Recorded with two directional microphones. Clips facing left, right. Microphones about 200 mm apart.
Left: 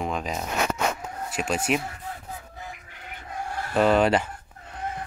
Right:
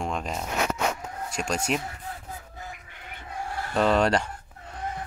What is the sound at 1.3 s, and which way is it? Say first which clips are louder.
Speech: left 2 dB; 5° left (ahead or behind).